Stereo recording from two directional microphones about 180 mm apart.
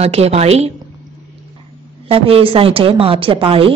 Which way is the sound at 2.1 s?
30° right (ahead or behind).